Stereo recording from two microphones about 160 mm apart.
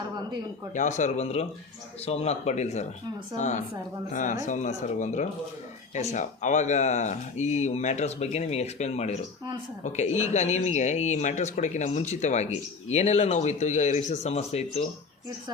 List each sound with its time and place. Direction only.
0.7 s speech: 50° left (ahead or behind)